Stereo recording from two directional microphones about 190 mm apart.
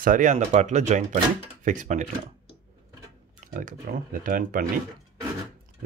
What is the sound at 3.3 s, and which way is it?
Speech, 45° right (ahead or behind).